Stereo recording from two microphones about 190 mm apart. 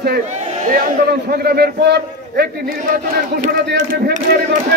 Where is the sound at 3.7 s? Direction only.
55° right (ahead or behind).